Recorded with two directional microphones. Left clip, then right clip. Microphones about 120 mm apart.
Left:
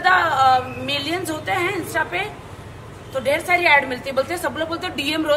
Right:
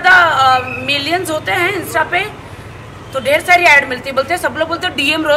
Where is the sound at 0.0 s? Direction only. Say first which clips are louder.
Right 7 dB; centre (ahead or behind).